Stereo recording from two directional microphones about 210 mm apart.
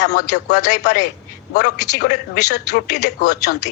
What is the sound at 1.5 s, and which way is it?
Speech, 50° left (ahead or behind).